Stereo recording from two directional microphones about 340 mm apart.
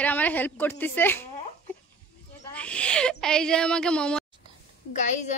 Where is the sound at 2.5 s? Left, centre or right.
Centre.